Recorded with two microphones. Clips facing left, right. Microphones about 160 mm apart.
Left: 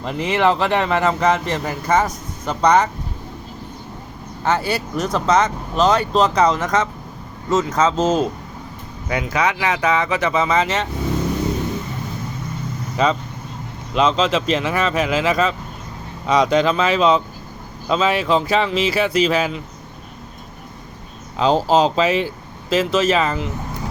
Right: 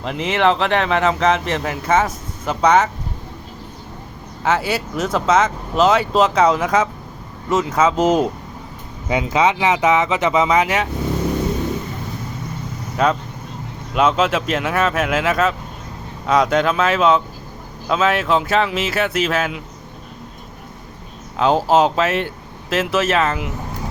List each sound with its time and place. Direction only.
0.0 s speech: centre (ahead or behind)
4.4 s speech: 5° right (ahead or behind)
13.0 s speech: 5° right (ahead or behind)
21.3 s speech: 5° right (ahead or behind)